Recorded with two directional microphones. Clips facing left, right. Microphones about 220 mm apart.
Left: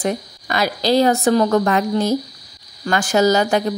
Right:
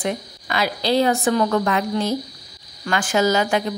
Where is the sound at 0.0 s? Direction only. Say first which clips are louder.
Left 3 dB; 40° left (ahead or behind).